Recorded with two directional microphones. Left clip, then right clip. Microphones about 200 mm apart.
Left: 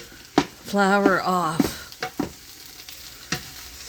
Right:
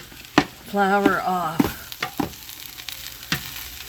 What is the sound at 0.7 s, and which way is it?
Speech, 50° left (ahead or behind).